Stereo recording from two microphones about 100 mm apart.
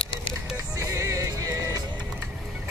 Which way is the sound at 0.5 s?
30° right (ahead or behind).